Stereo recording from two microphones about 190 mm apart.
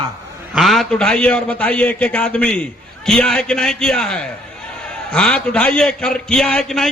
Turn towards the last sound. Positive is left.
turn(degrees=0)  # may be behind; listen again after turning